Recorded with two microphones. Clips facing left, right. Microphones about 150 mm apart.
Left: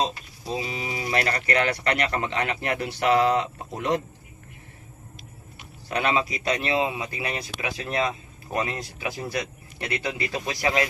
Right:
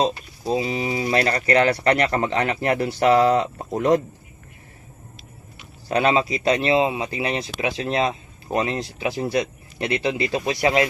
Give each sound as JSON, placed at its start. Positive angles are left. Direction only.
{"t": 0.0, "sound": "speech", "side_deg": -35}
{"t": 5.9, "sound": "speech", "side_deg": -30}